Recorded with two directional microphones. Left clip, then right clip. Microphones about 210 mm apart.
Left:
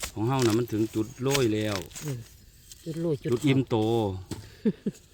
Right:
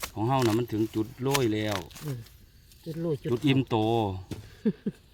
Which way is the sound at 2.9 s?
25° left (ahead or behind).